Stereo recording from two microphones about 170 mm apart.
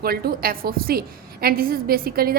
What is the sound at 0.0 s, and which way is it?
A woman's voice, 65° right (ahead or behind).